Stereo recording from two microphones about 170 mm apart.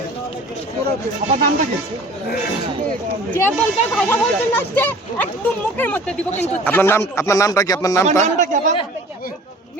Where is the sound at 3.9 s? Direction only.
10° left (ahead or behind).